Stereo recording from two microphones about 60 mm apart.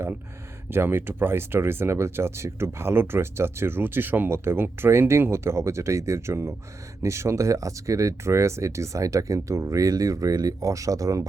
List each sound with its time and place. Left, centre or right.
0.7 s speech: right